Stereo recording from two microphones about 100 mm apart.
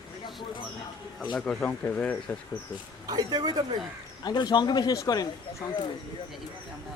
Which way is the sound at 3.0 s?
40° right (ahead or behind).